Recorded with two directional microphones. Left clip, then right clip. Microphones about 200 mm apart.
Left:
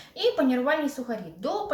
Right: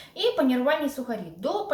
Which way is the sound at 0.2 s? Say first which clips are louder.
Even; centre (ahead or behind).